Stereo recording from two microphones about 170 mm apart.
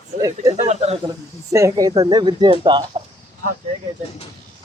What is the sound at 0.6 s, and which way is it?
Speech, 40° right (ahead or behind).